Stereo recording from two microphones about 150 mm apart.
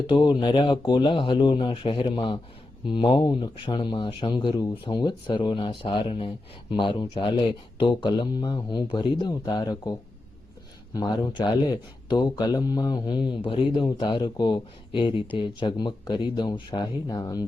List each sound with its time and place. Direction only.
0.1 s speech: 30° left (ahead or behind)